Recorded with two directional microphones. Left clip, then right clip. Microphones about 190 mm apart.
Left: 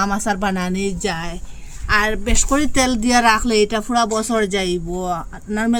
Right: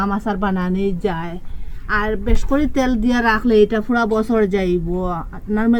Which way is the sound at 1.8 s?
15° left (ahead or behind).